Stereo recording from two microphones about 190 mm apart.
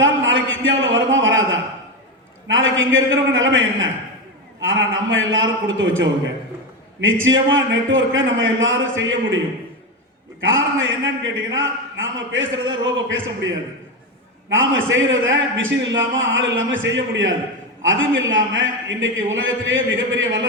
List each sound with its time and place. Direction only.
0.0 s a sound: 85° right
2.5 s a man's voice: 90° right
10.4 s a man's voice: 90° right
14.5 s a man's voice: 90° right
17.8 s a man's voice: 90° right